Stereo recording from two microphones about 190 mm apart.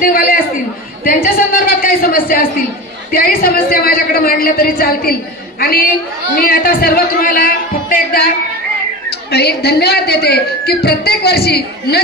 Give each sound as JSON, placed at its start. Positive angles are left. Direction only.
{"t": 0.0, "sound": "a man's voice", "side_deg": 50}
{"t": 9.3, "sound": "a woman's voice", "side_deg": 60}